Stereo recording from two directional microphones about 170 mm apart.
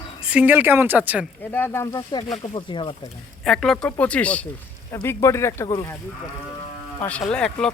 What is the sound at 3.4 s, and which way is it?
Speech, centre (ahead or behind).